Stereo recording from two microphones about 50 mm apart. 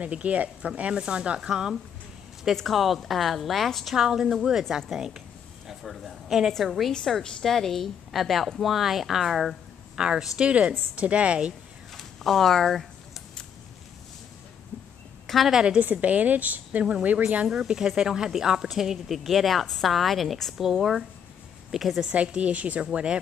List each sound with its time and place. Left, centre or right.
0.0 s a woman's voice: right
2.5 s speech: centre
3.9 s a woman's voice: centre
9.9 s a woman's voice: centre
11.9 s a sound: centre
15.2 s a woman's voice: centre
15.8 s a woman's voice: right
17.5 s speech: centre
21.7 s speech: centre
22.0 s a woman's voice: right